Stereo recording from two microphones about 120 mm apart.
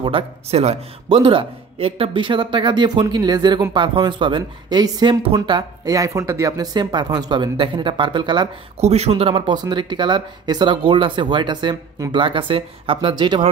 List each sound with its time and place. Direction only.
0.0 s speech: 55° right (ahead or behind)
5.9 s speech: 30° right (ahead or behind)
8.7 s speech: 60° right (ahead or behind)
9.2 s speech: 40° right (ahead or behind)